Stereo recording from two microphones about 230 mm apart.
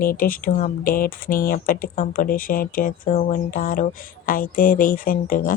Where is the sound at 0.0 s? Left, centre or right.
Left.